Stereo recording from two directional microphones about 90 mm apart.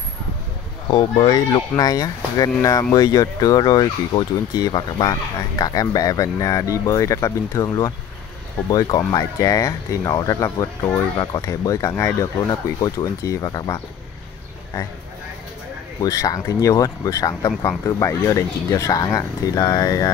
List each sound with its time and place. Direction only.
0.8 s speech: 50° left (ahead or behind)
16.0 s speech: 40° left (ahead or behind)